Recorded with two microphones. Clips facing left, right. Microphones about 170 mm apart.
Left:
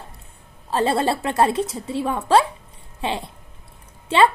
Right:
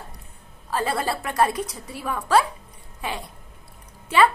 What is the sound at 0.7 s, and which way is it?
A woman's voice, 25° left (ahead or behind).